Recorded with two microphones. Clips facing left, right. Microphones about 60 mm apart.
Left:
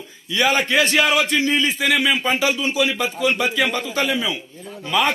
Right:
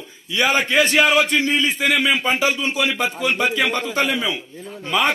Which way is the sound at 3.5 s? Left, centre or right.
Right.